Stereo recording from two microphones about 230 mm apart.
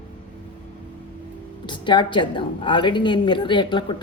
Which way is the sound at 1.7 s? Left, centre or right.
Left.